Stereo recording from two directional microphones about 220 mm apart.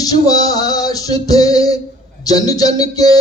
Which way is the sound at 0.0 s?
15° left (ahead or behind).